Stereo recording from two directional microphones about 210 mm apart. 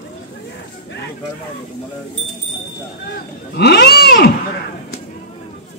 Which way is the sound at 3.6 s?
50° left (ahead or behind).